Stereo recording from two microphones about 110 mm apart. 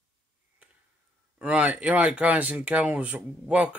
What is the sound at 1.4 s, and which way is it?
Speech, 10° right (ahead or behind).